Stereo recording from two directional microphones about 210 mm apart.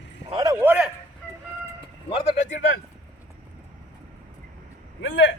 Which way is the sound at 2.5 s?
60° left (ahead or behind).